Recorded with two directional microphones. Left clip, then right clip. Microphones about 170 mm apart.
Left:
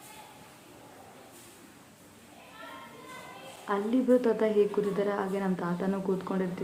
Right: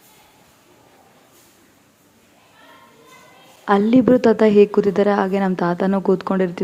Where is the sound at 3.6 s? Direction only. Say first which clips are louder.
Right 12 dB; 55° right (ahead or behind).